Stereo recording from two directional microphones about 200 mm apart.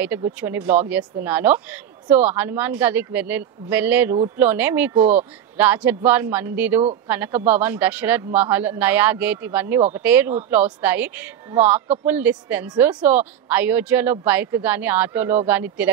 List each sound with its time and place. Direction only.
0.0 s speech: 10° right (ahead or behind)